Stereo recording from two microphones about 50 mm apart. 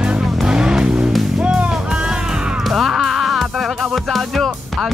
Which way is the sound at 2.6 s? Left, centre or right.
Centre.